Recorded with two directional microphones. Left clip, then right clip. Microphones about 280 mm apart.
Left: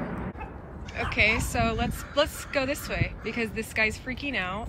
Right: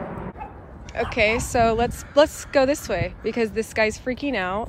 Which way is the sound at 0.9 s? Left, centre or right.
Centre.